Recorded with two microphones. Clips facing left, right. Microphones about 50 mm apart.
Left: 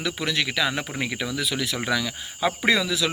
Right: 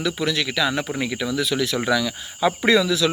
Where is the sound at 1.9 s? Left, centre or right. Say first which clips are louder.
Right 4 dB; left.